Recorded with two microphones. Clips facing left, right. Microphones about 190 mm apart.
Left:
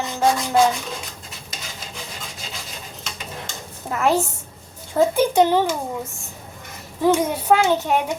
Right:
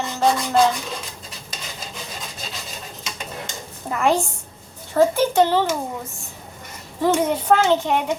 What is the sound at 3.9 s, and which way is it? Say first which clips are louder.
Speech: even; 5° left (ahead or behind).